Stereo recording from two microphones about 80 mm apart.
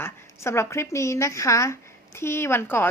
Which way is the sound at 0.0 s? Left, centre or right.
Left.